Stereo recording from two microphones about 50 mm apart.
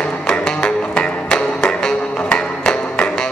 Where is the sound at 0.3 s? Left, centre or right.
Centre.